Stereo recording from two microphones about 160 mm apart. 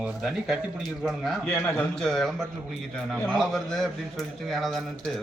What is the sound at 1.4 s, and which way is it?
Speech, 15° left (ahead or behind).